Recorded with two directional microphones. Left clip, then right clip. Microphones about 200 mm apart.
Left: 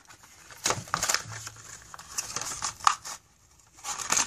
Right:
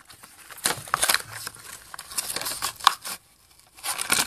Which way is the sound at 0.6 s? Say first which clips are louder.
Right 4 dB; 25° right (ahead or behind).